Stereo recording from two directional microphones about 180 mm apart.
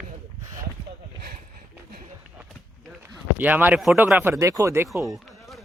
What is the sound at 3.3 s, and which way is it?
Speech, 10° right (ahead or behind).